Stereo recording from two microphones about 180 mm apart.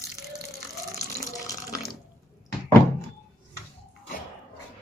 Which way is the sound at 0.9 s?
20° left (ahead or behind).